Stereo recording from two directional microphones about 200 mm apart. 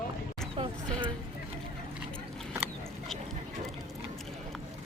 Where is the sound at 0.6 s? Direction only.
25° right (ahead or behind).